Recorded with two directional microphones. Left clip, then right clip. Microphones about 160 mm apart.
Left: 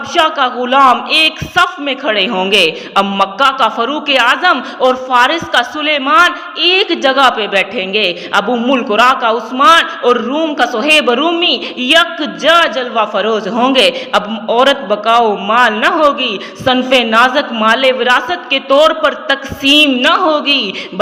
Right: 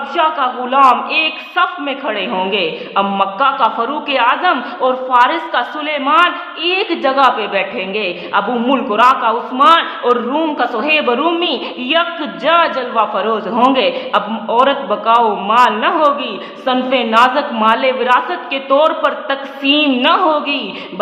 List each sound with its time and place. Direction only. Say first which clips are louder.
0.1 s a man's voice: left 3 dB; 25° left (ahead or behind)